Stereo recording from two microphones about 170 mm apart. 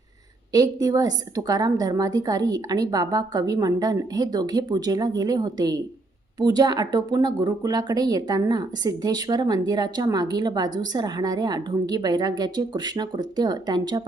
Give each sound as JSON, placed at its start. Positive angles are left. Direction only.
{"t": 0.5, "sound": "speech", "side_deg": -20}